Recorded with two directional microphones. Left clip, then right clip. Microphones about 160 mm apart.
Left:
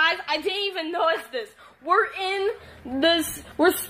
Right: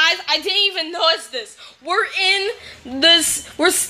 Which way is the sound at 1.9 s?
15° right (ahead or behind).